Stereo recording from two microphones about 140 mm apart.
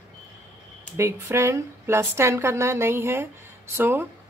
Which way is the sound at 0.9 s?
20° right (ahead or behind).